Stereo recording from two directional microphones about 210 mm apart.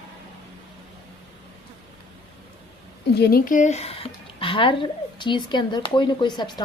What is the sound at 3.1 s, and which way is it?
A woman's voice, 45° left (ahead or behind).